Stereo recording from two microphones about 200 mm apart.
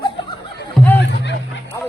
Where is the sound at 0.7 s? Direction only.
10° left (ahead or behind).